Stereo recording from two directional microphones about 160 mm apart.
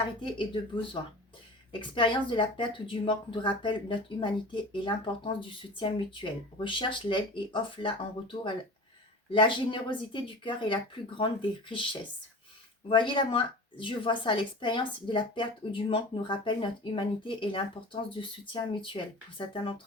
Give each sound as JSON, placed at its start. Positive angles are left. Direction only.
{"t": 0.2, "sound": "a woman's voice", "side_deg": 30}